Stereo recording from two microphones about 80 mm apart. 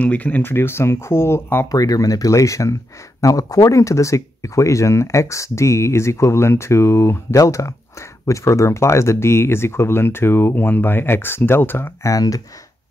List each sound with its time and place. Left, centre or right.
0.0 s speech: centre
1.7 s speech: left
12.0 s speech: left